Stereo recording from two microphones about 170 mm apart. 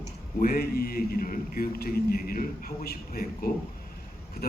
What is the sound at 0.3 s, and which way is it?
A man's voice, 60° left (ahead or behind).